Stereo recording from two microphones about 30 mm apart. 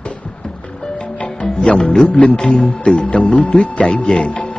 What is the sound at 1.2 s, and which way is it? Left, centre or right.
Music, left.